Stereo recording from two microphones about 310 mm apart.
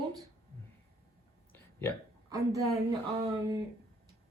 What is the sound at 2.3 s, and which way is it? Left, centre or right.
A woman's voice, centre.